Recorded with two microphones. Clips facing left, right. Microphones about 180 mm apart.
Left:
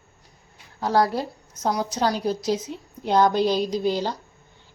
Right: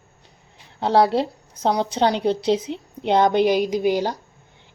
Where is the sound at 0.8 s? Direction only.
25° right (ahead or behind).